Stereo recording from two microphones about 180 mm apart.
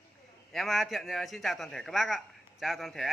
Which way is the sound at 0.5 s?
Centre (ahead or behind).